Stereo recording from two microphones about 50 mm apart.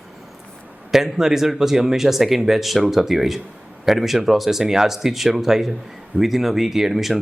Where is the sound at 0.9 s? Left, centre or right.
Centre.